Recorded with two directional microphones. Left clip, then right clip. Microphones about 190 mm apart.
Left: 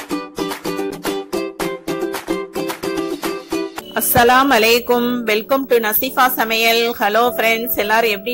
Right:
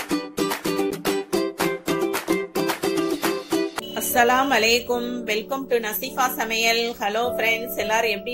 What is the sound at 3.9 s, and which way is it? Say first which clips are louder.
A woman's voice: left 7 dB; 45° left (ahead or behind).